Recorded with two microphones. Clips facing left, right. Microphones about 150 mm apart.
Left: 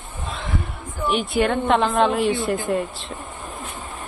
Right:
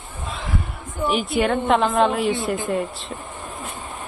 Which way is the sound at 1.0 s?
Centre (ahead or behind).